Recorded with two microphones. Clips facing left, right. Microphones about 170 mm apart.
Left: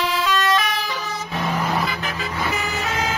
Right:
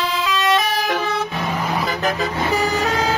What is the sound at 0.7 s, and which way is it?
Vehicle, 50° right (ahead or behind).